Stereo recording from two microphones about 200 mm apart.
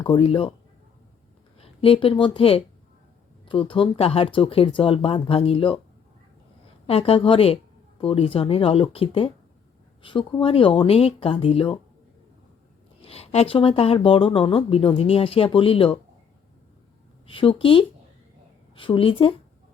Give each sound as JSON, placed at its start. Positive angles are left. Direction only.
{"t": 0.0, "sound": "speech", "side_deg": 25}
{"t": 1.5, "sound": "speech", "side_deg": 30}
{"t": 6.8, "sound": "speech", "side_deg": 30}
{"t": 13.0, "sound": "speech", "side_deg": 30}
{"t": 17.2, "sound": "speech", "side_deg": 25}